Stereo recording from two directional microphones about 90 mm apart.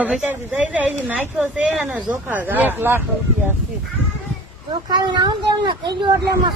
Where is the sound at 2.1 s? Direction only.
25° right (ahead or behind).